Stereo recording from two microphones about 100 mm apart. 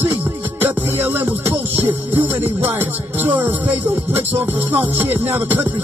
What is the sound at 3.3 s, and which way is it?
Music, 20° right (ahead or behind).